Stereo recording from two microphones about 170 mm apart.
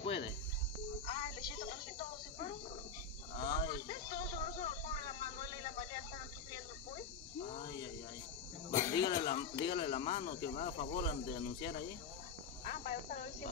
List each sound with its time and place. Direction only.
1.0 s music: 30° left (ahead or behind)
3.3 s a sound: 25° left (ahead or behind)
7.3 s cricket: 40° left (ahead or behind)
8.7 s snake: 15° left (ahead or behind)
9.0 s speech: 30° left (ahead or behind)
12.6 s cricket: 40° left (ahead or behind)